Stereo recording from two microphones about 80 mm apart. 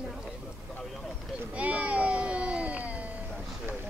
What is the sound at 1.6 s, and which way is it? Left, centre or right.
Speech, centre.